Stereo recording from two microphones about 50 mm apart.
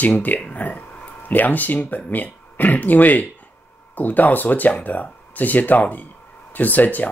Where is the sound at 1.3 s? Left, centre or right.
Left.